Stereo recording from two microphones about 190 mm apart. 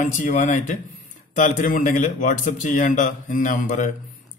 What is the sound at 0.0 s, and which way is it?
Speech, 40° left (ahead or behind).